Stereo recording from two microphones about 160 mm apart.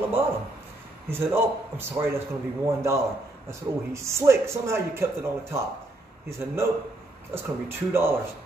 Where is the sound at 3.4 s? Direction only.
15° right (ahead or behind).